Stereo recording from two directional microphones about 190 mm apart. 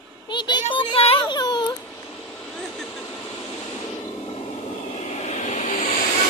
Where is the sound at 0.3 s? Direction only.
25° left (ahead or behind).